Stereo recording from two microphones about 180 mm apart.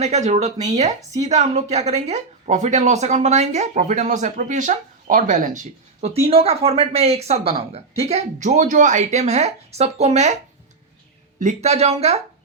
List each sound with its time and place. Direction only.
0.0 s speech: 40° right (ahead or behind)
11.3 s speech: 40° right (ahead or behind)